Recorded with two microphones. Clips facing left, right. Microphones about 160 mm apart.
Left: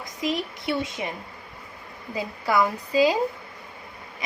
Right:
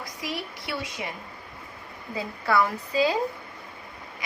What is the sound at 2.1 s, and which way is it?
Speech, 15° left (ahead or behind).